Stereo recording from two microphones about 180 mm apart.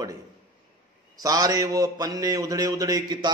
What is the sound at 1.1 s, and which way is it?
A man's voice, 20° right (ahead or behind).